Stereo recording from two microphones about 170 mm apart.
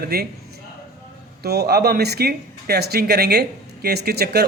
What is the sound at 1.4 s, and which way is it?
Speech, 70° right (ahead or behind).